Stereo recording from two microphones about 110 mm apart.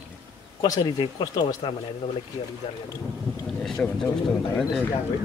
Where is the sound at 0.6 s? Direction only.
40° left (ahead or behind).